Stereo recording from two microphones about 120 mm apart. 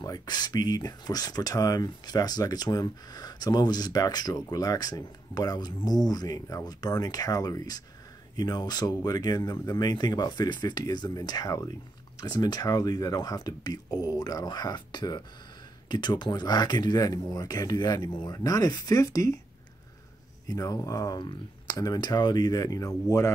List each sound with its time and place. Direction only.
0.0 s speech: 30° left (ahead or behind)
20.4 s speech: 30° left (ahead or behind)